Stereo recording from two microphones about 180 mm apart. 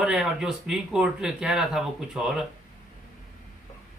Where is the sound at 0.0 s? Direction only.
Centre (ahead or behind).